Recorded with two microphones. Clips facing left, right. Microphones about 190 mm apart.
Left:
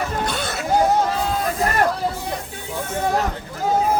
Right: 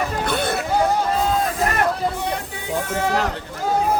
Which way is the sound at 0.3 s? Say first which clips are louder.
Right 4 dB; 55° right (ahead or behind).